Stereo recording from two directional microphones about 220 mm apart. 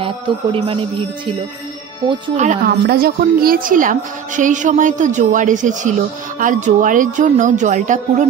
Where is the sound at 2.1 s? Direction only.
35° right (ahead or behind).